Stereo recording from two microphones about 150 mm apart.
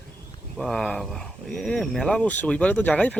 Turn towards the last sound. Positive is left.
turn(degrees=10)  # may be behind; listen again after turning